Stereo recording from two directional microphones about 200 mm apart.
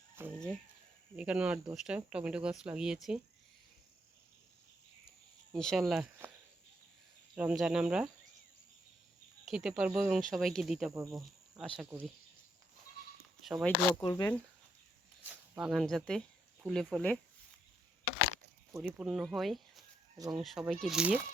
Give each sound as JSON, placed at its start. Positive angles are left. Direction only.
{"t": 0.3, "sound": "chicken", "side_deg": 5}
{"t": 1.1, "sound": "speech", "side_deg": -5}
{"t": 5.5, "sound": "speech", "side_deg": 0}
{"t": 5.9, "sound": "speech", "side_deg": -10}
{"t": 7.3, "sound": "speech", "side_deg": -5}
{"t": 9.5, "sound": "speech", "side_deg": -5}
{"t": 13.4, "sound": "speech", "side_deg": 0}
{"t": 14.0, "sound": "speech", "side_deg": 20}
{"t": 15.2, "sound": "speech", "side_deg": -5}
{"t": 18.8, "sound": "speech", "side_deg": -5}